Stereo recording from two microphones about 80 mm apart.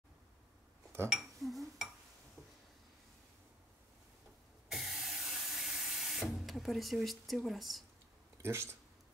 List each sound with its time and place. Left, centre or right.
1.0 s dishes: centre
4.6 s a sound: centre
8.4 s speech: right